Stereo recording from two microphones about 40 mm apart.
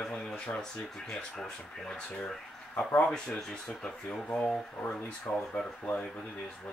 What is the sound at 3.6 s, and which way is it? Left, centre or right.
Speech, left.